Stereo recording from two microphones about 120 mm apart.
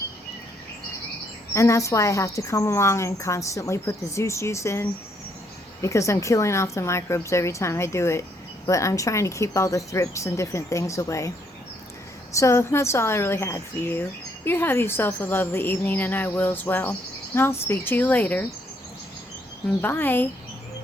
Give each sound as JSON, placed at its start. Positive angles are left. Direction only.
{"t": 1.5, "sound": "speech", "side_deg": 25}
{"t": 12.3, "sound": "speech", "side_deg": 25}
{"t": 19.8, "sound": "speech", "side_deg": 15}